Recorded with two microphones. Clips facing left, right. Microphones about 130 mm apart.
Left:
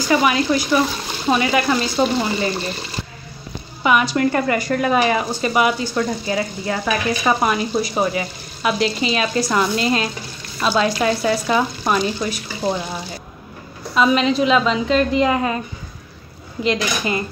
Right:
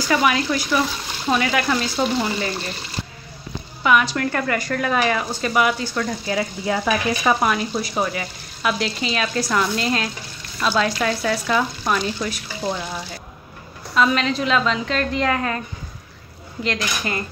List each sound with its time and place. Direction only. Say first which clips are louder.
0.1 s frying: left 3 dB; 5° left (ahead or behind)
0.7 s speech: left 3 dB; 10° left (ahead or behind)
3.8 s speech: left 2 dB; 5° left (ahead or behind)
6.3 s frying: right 3 dB; 5° right (ahead or behind)
10.6 s speech: left 2 dB; 10° left (ahead or behind)
16.6 s speech: left 5 dB; 15° left (ahead or behind)